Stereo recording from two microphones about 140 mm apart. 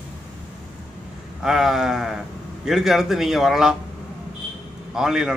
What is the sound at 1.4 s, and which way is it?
A man's voice, 5° right (ahead or behind).